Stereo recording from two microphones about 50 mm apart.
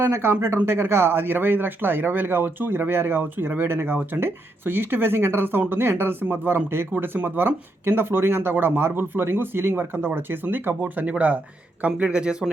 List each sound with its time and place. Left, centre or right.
0.0 s speech: right
11.9 s speech: right